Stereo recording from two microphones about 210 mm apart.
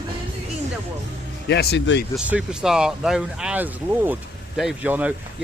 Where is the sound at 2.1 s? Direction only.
5° right (ahead or behind).